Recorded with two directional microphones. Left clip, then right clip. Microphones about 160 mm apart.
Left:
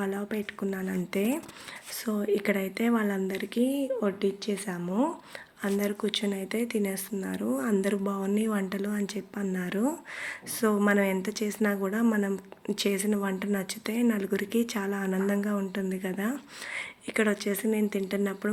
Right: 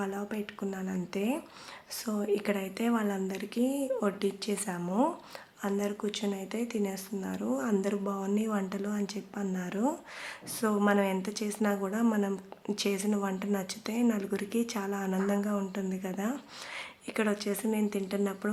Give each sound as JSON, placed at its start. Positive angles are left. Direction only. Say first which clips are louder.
{"t": 0.0, "sound": "speech", "louder": "left 3 dB", "side_deg": 15}
{"t": 5.6, "sound": "speech", "louder": "left 3 dB", "side_deg": 20}